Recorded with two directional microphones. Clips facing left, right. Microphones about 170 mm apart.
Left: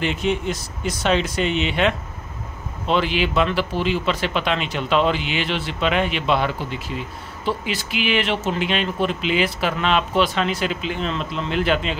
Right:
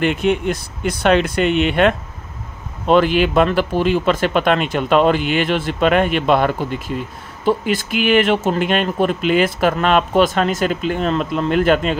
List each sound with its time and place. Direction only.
0.0 s speech: 55° right (ahead or behind)